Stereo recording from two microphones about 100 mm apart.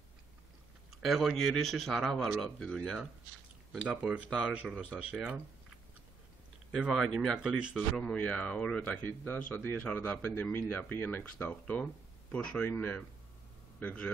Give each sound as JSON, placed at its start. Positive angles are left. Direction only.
{"t": 1.0, "sound": "a man's voice", "side_deg": 0}
{"t": 3.7, "sound": "speech", "side_deg": -10}
{"t": 6.7, "sound": "a man's voice", "side_deg": 0}
{"t": 7.9, "sound": "a man's voice", "side_deg": 10}